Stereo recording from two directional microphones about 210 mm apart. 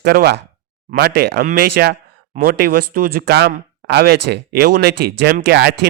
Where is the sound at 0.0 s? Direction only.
45° right (ahead or behind).